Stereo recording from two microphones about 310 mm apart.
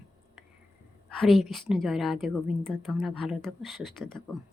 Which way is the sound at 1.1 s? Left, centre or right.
Centre.